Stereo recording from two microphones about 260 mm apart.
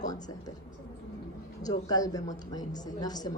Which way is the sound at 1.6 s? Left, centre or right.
Centre.